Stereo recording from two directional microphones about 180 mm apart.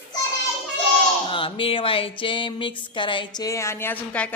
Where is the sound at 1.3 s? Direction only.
30° left (ahead or behind).